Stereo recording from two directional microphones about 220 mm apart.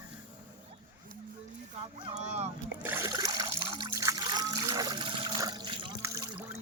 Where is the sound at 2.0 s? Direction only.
30° right (ahead or behind).